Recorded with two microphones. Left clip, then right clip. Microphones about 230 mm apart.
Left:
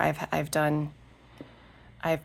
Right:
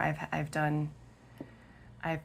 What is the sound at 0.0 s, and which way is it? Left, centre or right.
Speech, left.